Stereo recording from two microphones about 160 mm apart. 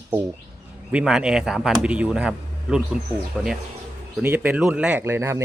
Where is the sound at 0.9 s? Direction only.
5° right (ahead or behind).